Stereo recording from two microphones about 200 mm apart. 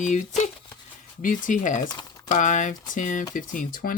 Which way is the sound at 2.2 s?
40° left (ahead or behind).